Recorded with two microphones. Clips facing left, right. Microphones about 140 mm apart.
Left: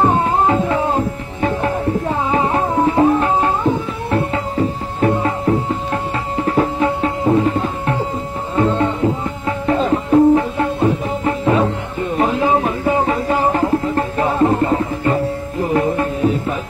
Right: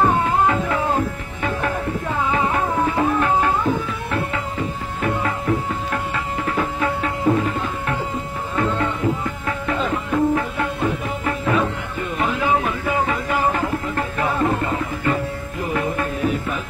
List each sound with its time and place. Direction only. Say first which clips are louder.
0.0 s music: left 3 dB; 30° left (ahead or behind)
6.3 s tabla: left 8 dB; 30° left (ahead or behind)
8.5 s music: left 6 dB; 30° left (ahead or behind)